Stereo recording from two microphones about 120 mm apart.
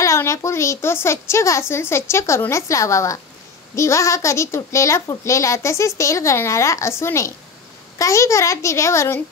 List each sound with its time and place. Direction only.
0.0 s a woman's voice: 25° left (ahead or behind)